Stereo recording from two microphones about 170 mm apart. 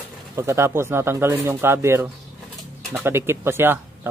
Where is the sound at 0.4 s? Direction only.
15° right (ahead or behind).